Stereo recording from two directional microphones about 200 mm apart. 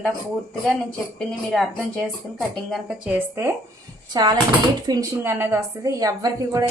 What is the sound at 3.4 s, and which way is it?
A woman's voice, 10° right (ahead or behind).